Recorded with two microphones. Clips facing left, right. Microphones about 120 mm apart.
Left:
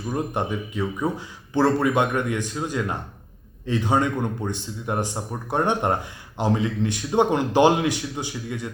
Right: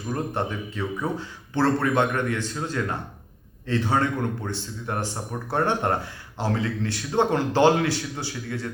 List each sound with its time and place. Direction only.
0.1 s speech: 15° left (ahead or behind)